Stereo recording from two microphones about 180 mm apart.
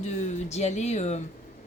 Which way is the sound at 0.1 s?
40° left (ahead or behind).